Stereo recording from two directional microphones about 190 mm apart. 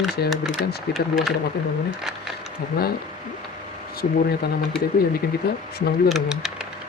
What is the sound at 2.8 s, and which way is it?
Speech, 55° left (ahead or behind).